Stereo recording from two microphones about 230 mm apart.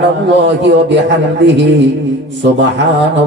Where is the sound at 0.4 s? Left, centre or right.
Right.